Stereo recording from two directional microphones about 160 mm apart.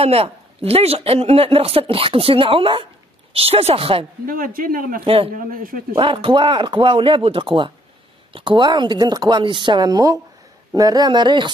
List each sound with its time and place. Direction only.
0.0 s speech: 40° right (ahead or behind)
4.3 s speech: 60° right (ahead or behind)
5.0 s speech: 35° right (ahead or behind)
5.3 s speech: 60° right (ahead or behind)
5.9 s speech: 35° right (ahead or behind)